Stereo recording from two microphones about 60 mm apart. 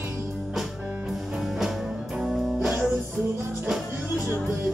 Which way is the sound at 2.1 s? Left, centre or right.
Centre.